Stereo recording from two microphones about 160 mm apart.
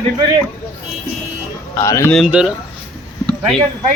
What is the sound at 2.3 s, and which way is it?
Speech, 5° right (ahead or behind).